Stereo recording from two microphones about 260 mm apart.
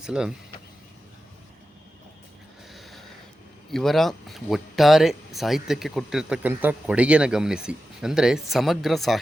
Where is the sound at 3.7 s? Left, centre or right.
Centre.